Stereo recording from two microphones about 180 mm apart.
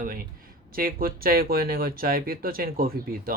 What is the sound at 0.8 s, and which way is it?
Speech, 55° right (ahead or behind).